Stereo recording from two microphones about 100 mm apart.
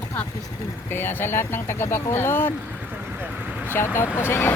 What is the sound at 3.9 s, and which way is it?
Speech, 25° left (ahead or behind).